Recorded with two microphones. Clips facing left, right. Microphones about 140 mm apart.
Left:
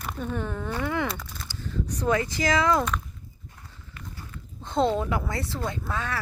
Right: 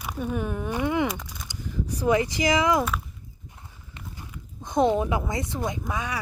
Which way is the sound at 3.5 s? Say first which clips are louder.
Even; 15° right (ahead or behind).